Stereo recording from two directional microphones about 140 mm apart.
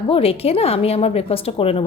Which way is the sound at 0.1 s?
45° left (ahead or behind).